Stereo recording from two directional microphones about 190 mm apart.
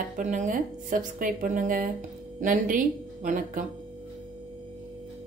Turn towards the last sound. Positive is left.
turn(degrees=-40)  # may be behind; listen again after turning